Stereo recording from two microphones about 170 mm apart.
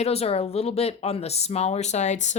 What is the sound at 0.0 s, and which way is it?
Speech, 35° left (ahead or behind).